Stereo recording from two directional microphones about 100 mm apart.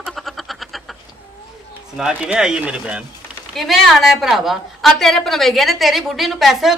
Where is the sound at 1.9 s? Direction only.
10° right (ahead or behind).